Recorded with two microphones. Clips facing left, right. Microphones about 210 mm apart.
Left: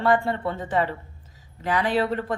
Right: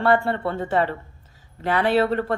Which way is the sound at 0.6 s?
45° right (ahead or behind).